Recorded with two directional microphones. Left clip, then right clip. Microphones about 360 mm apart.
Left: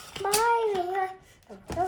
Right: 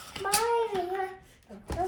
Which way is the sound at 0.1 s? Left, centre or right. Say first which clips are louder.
Left 3 dB; centre.